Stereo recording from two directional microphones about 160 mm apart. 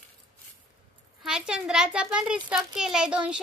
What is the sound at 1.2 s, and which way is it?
A child's voice, 5° right (ahead or behind).